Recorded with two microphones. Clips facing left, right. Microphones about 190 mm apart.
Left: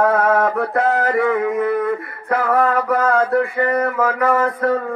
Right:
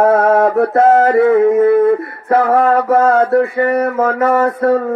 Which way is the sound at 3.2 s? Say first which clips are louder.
Right 5 dB; 35° right (ahead or behind).